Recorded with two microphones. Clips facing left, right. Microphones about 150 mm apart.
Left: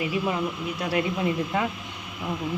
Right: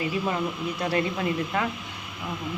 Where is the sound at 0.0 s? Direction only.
15° left (ahead or behind).